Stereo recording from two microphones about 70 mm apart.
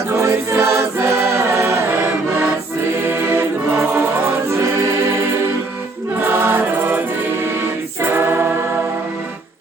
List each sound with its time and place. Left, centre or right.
0.1 s music: right
3.0 s music: right
6.1 s music: right
8.0 s a capella: right